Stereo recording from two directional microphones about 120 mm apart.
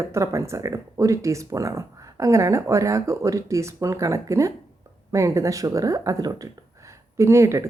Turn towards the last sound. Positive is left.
turn(degrees=-25)  # may be behind; listen again after turning